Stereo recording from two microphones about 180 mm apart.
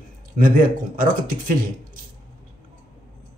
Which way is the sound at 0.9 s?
50° right (ahead or behind).